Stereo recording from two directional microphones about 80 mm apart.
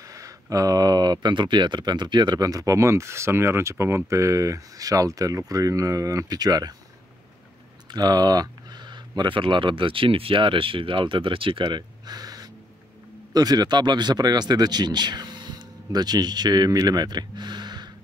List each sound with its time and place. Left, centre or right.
0.0 s speech: right
7.9 s speech: right